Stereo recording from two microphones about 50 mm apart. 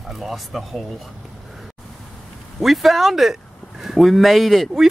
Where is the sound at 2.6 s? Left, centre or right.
Centre.